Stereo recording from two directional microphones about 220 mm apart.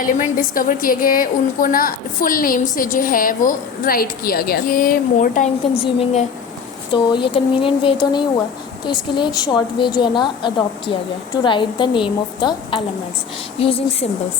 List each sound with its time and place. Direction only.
0.0 s a woman's voice: 40° left (ahead or behind)
5.8 s a woman's voice: 25° left (ahead or behind)